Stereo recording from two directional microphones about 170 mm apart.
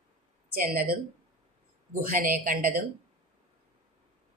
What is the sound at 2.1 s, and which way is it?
Speech, 55° right (ahead or behind).